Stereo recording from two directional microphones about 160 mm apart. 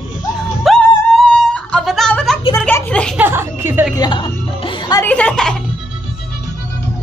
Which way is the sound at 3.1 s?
15° right (ahead or behind).